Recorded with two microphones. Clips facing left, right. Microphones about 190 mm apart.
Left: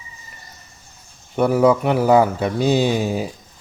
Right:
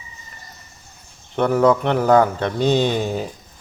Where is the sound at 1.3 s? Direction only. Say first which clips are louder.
Left 1 dB; 10° left (ahead or behind).